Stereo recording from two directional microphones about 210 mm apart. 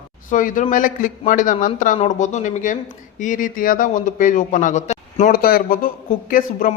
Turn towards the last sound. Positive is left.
turn(degrees=40)  # may be behind; listen again after turning